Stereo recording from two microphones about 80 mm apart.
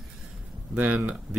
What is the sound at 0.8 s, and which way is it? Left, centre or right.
Speech, centre.